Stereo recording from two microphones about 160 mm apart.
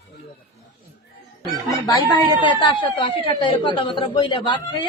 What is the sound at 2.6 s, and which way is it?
Speech, 30° left (ahead or behind).